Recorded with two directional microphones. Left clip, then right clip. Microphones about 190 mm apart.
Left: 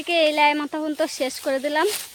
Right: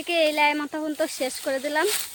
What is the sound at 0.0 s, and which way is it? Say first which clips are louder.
Speech: left 3 dB; 35° left (ahead or behind).